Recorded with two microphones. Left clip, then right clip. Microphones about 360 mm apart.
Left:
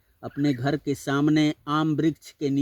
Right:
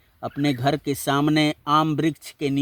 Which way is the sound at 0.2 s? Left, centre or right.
Right.